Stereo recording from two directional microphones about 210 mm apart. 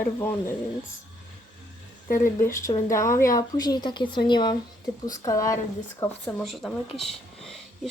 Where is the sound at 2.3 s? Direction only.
15° left (ahead or behind).